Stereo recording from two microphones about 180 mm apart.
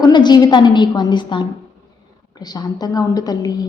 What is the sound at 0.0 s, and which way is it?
A woman's voice, 25° left (ahead or behind).